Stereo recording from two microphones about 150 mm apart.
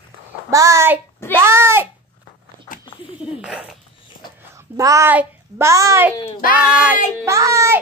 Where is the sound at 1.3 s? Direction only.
15° right (ahead or behind).